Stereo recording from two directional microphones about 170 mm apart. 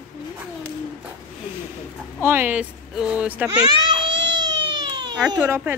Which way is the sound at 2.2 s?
10° right (ahead or behind).